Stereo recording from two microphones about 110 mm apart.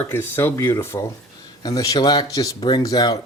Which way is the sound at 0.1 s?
20° left (ahead or behind).